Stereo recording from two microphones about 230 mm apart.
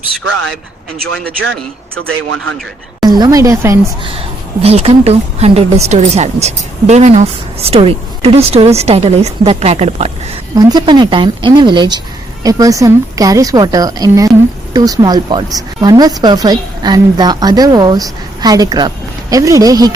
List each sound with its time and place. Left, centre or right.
0.3 s a man's voice: right
2.0 s a man's voice: right
3.1 s a woman's voice: centre
4.6 s speech: right
10.5 s a woman's voice: centre